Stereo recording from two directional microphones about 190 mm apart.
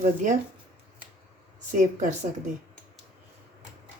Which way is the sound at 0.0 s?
40° right (ahead or behind).